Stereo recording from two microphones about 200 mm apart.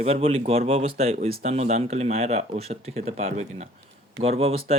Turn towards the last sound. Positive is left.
turn(degrees=-30)  # may be behind; listen again after turning